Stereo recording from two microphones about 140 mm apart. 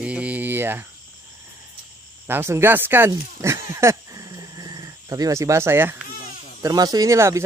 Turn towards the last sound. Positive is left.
turn(degrees=-20)  # may be behind; listen again after turning